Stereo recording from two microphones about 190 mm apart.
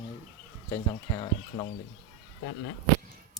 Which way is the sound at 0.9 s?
25° left (ahead or behind).